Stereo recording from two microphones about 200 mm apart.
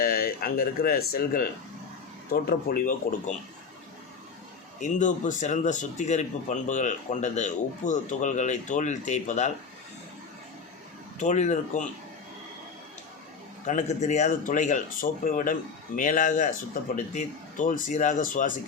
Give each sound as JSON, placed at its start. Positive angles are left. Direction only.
{"t": 0.0, "sound": "speech", "side_deg": 45}
{"t": 4.8, "sound": "speech", "side_deg": 40}
{"t": 11.2, "sound": "speech", "side_deg": 35}
{"t": 13.7, "sound": "speech", "side_deg": 35}